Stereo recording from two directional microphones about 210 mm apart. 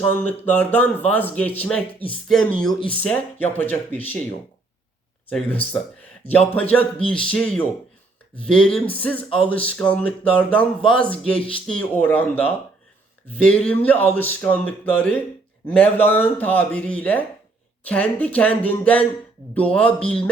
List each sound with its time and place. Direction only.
0.0 s speech: 10° left (ahead or behind)
5.3 s speech: 5° left (ahead or behind)
11.3 s speech: 25° left (ahead or behind)
11.7 s speech: 5° left (ahead or behind)
13.4 s speech: 5° left (ahead or behind)